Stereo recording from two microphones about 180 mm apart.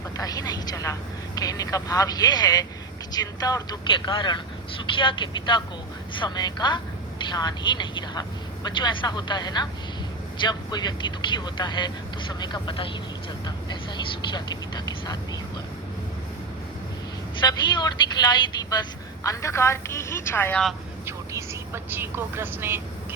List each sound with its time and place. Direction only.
0.2 s a sound: 20° left (ahead or behind)
1.4 s speech: 20° left (ahead or behind)
17.4 s speech: 25° left (ahead or behind); by 20.7 s 5° left (ahead or behind)
21.3 s speech: 10° right (ahead or behind)